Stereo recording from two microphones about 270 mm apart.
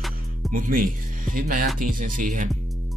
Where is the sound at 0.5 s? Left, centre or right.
Right.